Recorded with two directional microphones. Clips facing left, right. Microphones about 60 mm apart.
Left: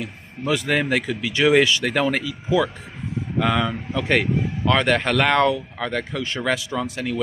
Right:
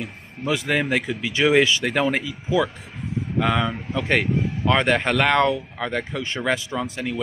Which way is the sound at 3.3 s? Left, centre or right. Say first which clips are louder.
Left 1 dB; centre.